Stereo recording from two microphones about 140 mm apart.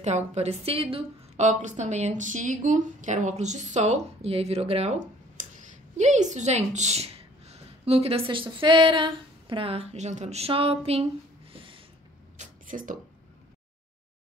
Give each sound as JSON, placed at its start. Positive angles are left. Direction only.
{"t": 0.0, "sound": "a woman's voice", "side_deg": -55}
{"t": 1.4, "sound": "speech", "side_deg": -60}
{"t": 5.9, "sound": "a woman's voice", "side_deg": -60}
{"t": 11.5, "sound": "snort", "side_deg": -40}
{"t": 12.4, "sound": "a sound", "side_deg": -70}